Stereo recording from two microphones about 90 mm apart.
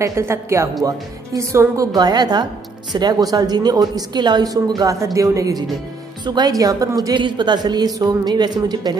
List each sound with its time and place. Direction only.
0.0 s speech: 30° right (ahead or behind)
1.9 s a woman's voice: 45° right (ahead or behind)
7.2 s a woman's voice: 60° right (ahead or behind)